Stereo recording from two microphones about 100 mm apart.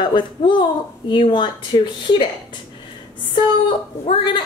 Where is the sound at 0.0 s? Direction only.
50° left (ahead or behind).